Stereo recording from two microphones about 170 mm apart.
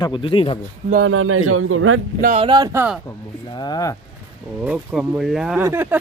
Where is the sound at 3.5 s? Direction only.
25° left (ahead or behind).